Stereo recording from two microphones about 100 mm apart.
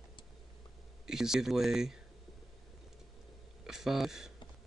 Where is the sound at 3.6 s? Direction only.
5° right (ahead or behind).